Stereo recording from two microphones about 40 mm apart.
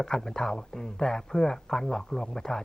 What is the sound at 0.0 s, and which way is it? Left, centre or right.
Speech, centre.